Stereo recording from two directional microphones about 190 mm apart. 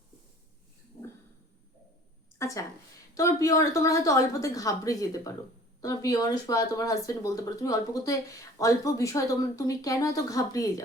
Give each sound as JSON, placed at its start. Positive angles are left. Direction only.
{"t": 2.4, "sound": "a woman's voice", "side_deg": 15}